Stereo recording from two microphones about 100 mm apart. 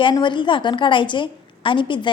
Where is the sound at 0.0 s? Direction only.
50° left (ahead or behind).